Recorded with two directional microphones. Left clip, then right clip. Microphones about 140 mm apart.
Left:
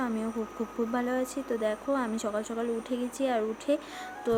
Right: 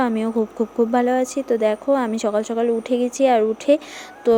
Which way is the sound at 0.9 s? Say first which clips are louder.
Right 11 dB; 45° right (ahead or behind).